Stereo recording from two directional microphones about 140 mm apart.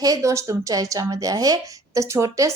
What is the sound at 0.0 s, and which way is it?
A woman's voice, 25° right (ahead or behind).